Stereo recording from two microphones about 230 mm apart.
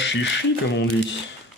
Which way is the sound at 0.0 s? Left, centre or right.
Left.